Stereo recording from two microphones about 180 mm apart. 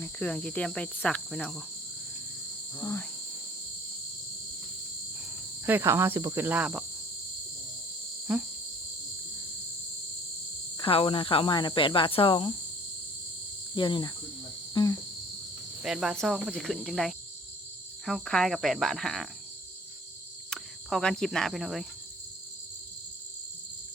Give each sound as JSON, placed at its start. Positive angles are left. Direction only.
{"t": 0.0, "sound": "cricket", "side_deg": 5}
{"t": 2.7, "sound": "speech", "side_deg": 20}
{"t": 5.6, "sound": "cricket", "side_deg": -10}
{"t": 8.3, "sound": "cricket", "side_deg": -5}
{"t": 10.8, "sound": "speech", "side_deg": 30}
{"t": 13.7, "sound": "speech", "side_deg": 25}
{"t": 14.7, "sound": "cricket", "side_deg": 20}
{"t": 15.8, "sound": "cricket", "side_deg": -5}
{"t": 20.5, "sound": "cricket", "side_deg": 5}